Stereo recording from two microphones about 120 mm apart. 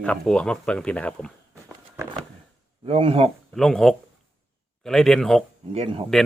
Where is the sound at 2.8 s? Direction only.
55° right (ahead or behind).